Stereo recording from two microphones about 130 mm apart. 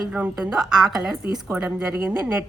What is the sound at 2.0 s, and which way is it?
Speech, 15° right (ahead or behind).